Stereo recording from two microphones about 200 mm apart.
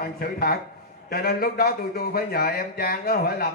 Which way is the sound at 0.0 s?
50° left (ahead or behind).